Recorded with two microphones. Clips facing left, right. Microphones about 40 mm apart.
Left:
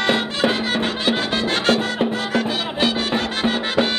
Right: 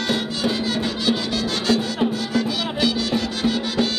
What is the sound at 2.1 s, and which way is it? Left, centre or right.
Music, left.